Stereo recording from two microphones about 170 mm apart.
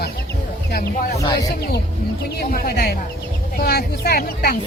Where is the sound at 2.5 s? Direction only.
65° left (ahead or behind).